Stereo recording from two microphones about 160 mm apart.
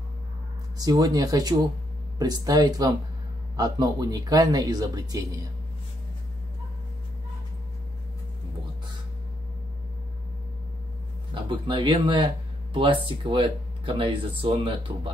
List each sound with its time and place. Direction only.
0.7 s speech: 25° right (ahead or behind)
11.3 s speech: 30° right (ahead or behind)